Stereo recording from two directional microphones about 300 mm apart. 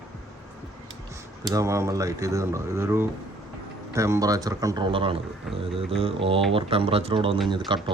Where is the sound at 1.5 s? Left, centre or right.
Centre.